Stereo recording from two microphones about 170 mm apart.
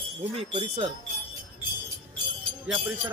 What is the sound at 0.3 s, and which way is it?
Speech, 35° right (ahead or behind).